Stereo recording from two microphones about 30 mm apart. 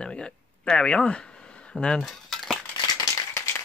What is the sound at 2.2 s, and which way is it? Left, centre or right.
Crumpling, centre.